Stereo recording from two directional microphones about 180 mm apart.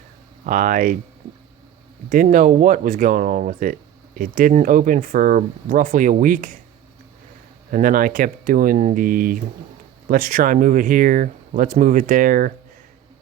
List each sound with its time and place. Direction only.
0.4 s speech: 50° right (ahead or behind)
2.0 s speech: 50° right (ahead or behind)
7.7 s speech: 50° right (ahead or behind)